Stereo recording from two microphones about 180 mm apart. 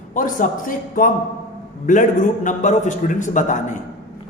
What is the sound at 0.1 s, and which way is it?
A man's voice, 45° left (ahead or behind).